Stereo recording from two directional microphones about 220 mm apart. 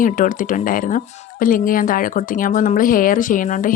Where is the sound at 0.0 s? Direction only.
35° left (ahead or behind).